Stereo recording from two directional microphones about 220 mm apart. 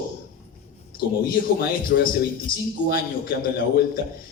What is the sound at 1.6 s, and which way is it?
A man's voice, 40° left (ahead or behind).